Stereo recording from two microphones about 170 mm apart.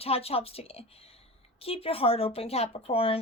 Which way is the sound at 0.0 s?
35° left (ahead or behind).